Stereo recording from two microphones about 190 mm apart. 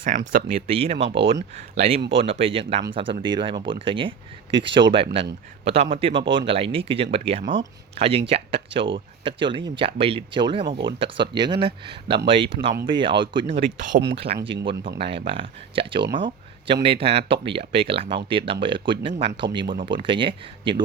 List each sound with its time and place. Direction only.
0.3 s speech: 45° right (ahead or behind)
0.7 s speech: 30° right (ahead or behind)
13.7 s speech: 45° right (ahead or behind)
14.4 s speech: 25° right (ahead or behind)
16.1 s a sound: 25° right (ahead or behind)
16.8 s speech: 30° right (ahead or behind)